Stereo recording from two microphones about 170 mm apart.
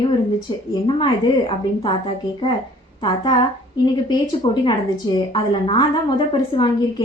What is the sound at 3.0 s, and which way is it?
A woman's voice, 30° left (ahead or behind).